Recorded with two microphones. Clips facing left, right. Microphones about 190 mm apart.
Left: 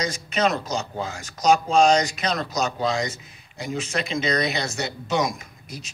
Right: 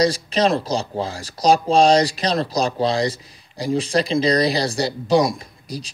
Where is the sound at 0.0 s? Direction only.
35° right (ahead or behind).